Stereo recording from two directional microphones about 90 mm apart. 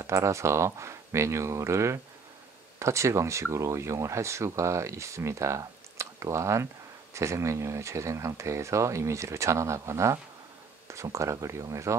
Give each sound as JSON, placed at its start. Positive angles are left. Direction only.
{"t": 0.0, "sound": "speech", "side_deg": -35}